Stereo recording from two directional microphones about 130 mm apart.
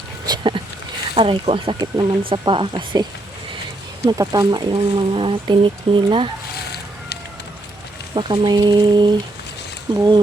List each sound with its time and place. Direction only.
0.3 s speech: 40° right (ahead or behind)
4.0 s speech: 30° right (ahead or behind)
8.1 s speech: 35° right (ahead or behind)